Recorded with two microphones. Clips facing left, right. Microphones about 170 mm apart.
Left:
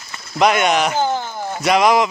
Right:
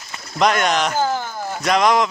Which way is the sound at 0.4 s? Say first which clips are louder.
Left 2 dB; 5° left (ahead or behind).